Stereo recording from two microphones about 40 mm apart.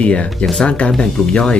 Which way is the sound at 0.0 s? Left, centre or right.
Left.